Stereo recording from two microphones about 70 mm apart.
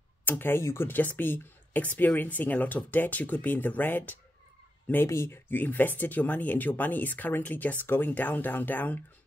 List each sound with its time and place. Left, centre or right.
0.2 s speech: left
5.0 s speech: left
5.5 s speech: left